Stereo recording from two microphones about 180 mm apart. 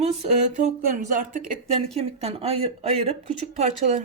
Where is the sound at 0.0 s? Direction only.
35° right (ahead or behind).